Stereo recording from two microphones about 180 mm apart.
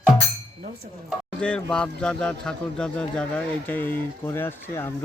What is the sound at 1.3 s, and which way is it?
Speech, 5° left (ahead or behind).